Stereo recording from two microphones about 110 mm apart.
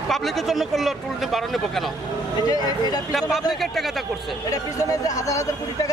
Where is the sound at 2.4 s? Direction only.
35° left (ahead or behind).